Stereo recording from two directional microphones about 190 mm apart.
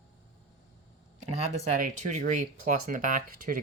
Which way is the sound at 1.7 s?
45° right (ahead or behind).